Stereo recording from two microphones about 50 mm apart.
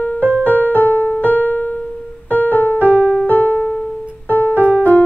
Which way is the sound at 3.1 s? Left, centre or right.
Left.